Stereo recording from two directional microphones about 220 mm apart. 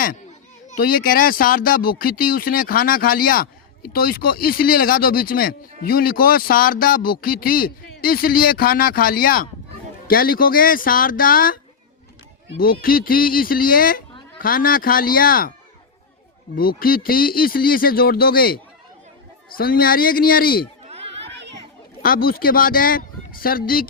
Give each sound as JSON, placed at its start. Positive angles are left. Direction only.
{"t": 0.7, "sound": "speech", "side_deg": 40}
{"t": 16.6, "sound": "speech", "side_deg": 40}
{"t": 20.8, "sound": "chatter", "side_deg": -30}
{"t": 21.2, "sound": "children playing", "side_deg": -50}
{"t": 22.0, "sound": "speech", "side_deg": 40}